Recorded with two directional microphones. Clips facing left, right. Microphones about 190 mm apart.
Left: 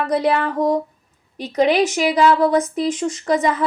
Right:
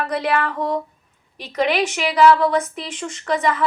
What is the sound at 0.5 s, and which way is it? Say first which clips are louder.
Speech: left 5 dB; 40° left (ahead or behind).